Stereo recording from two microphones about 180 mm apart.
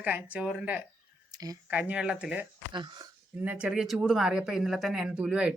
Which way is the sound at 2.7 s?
25° right (ahead or behind).